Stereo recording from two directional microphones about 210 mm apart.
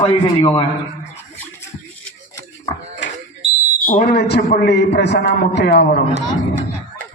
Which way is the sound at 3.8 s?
45° left (ahead or behind).